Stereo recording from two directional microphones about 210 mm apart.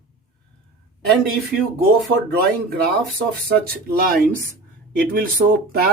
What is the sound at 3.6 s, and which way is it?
Speech, 45° right (ahead or behind).